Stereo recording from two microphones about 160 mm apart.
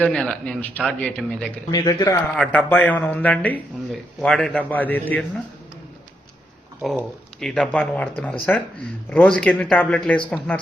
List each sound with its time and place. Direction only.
0.0 s speech: 5° left (ahead or behind)
1.7 s speech: 20° left (ahead or behind)
2.3 s speech: 5° left (ahead or behind)
6.8 s speech: centre (ahead or behind)